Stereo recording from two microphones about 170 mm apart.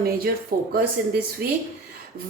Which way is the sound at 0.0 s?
60° right (ahead or behind).